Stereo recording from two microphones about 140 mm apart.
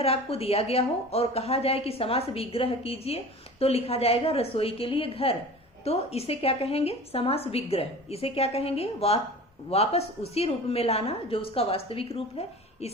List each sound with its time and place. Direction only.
0.0 s a woman's voice: 45° left (ahead or behind)